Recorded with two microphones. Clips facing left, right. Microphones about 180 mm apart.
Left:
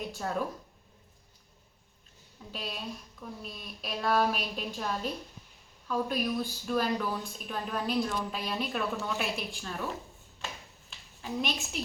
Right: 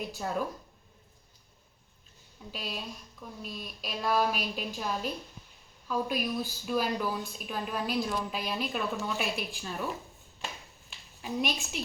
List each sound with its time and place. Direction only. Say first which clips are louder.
0.1 s a woman's voice: left 1 dB; 5° right (ahead or behind)
2.5 s a woman's voice: even; centre (ahead or behind)
10.8 s a sound: right 1 dB; 10° right (ahead or behind)